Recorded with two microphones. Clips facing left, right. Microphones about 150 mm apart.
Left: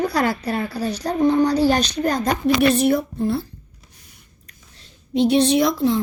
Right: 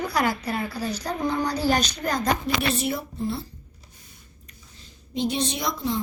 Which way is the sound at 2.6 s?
55° left (ahead or behind).